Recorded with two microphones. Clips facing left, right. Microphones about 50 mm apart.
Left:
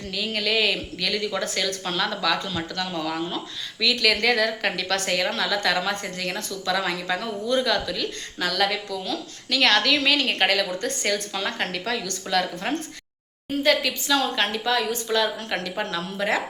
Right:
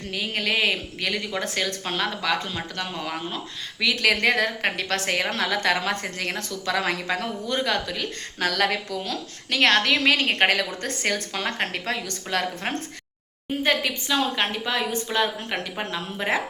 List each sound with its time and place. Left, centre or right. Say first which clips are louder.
0.1 s speech: even; right
13.6 s a woman's voice: left 2 dB; right